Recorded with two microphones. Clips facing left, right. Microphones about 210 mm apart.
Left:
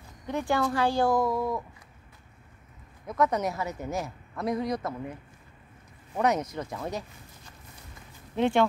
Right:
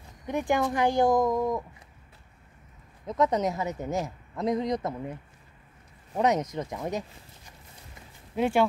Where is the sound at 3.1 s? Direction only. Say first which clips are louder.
Right 1 dB; 20° right (ahead or behind).